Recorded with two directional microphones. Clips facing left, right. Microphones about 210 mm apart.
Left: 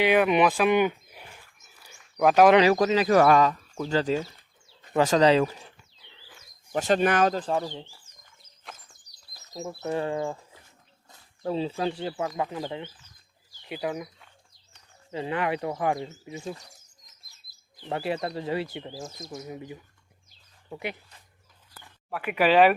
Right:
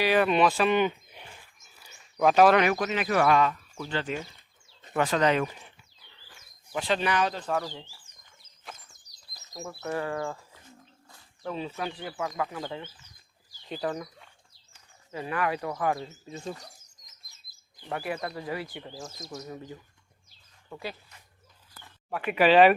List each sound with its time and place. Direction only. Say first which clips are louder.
0.2 s speech: left 2 dB; 15° left (ahead or behind)
0.6 s a sound: left 2 dB; 10° left (ahead or behind)
2.1 s speech: left 2 dB; 10° left (ahead or behind)
2.6 s speech: left 5 dB; 35° left (ahead or behind)
6.7 s speech: left 5 dB; 45° left (ahead or behind)
7.6 s speech: left 3 dB; 20° left (ahead or behind)
8.7 s bird: even; centre (ahead or behind)
9.6 s speech: left 3 dB; 20° left (ahead or behind)
11.4 s speech: left 6 dB; 30° left (ahead or behind)
12.4 s speech: left 2 dB; 20° left (ahead or behind)
15.1 s speech: left 2 dB; 25° left (ahead or behind)
17.8 s speech: left 4 dB; 25° left (ahead or behind)
22.1 s speech: right 1 dB; 10° left (ahead or behind)